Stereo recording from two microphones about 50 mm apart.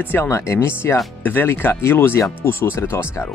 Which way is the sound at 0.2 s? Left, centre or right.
Left.